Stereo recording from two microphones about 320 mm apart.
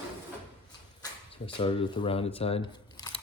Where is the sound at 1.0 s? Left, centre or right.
Centre.